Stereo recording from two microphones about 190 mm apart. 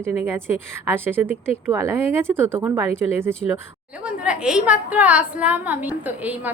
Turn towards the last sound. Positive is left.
turn(degrees=-10)  # may be behind; listen again after turning